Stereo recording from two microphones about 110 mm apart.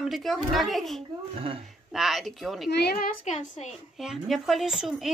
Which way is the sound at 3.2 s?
90° left.